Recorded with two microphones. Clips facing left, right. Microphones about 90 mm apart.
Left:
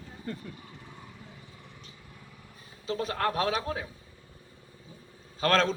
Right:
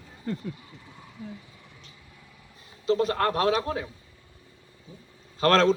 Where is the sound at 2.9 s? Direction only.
5° left (ahead or behind).